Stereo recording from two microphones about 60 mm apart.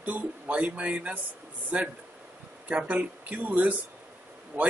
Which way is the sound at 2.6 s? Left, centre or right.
Right.